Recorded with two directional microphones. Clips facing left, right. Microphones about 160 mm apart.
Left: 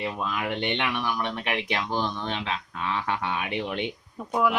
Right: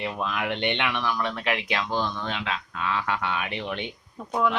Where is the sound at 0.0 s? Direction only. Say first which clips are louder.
Even; 5° left (ahead or behind).